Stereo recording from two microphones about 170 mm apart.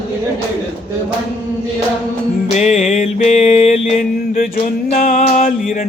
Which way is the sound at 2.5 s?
40° left (ahead or behind).